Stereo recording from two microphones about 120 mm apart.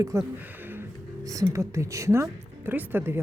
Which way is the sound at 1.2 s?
30° right (ahead or behind).